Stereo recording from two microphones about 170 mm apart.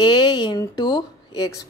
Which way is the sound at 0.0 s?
25° left (ahead or behind).